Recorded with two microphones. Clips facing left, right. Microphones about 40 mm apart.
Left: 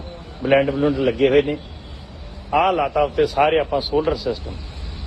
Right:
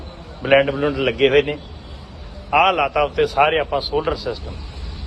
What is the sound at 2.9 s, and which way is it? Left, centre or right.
A man's voice, right.